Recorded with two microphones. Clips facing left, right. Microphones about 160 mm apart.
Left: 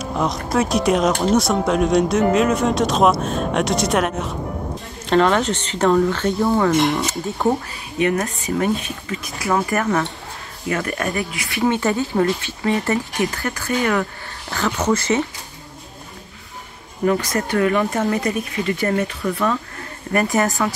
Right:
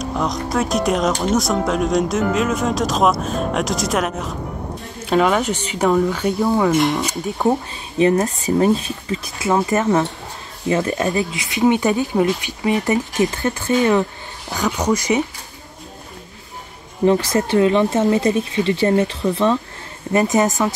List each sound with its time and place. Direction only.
0.0 s speech: centre (ahead or behind)
6.8 s speech: centre (ahead or behind)
8.0 s speech: 30° right (ahead or behind); by 15.2 s 15° right (ahead or behind)
17.0 s speech: 25° right (ahead or behind)